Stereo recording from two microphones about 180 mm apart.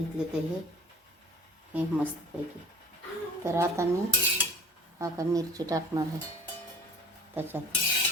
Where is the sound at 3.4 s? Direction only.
15° right (ahead or behind).